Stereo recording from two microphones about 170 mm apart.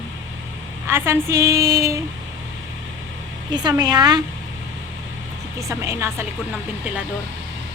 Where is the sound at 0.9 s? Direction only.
15° right (ahead or behind).